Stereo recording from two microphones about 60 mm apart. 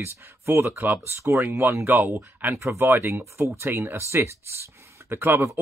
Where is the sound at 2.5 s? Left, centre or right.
Right.